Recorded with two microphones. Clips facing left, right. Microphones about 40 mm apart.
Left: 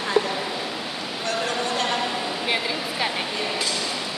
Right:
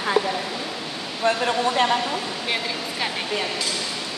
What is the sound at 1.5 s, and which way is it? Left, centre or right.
Speech, centre.